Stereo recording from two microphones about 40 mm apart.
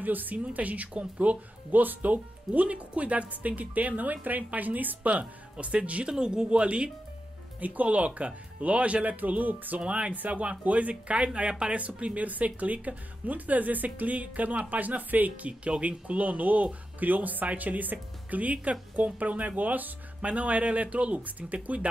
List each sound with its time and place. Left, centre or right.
0.0 s speech: right
6.0 s speech: centre
7.6 s speech: right
9.8 s speech: right
20.2 s speech: right